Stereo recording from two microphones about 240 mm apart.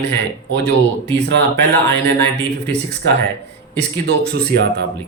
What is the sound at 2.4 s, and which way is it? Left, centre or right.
Speech, centre.